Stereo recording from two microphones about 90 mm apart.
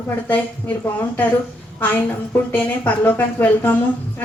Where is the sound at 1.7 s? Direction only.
20° left (ahead or behind).